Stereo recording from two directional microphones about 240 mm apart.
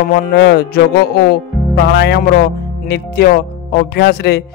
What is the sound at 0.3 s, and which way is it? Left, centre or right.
A man's voice, left.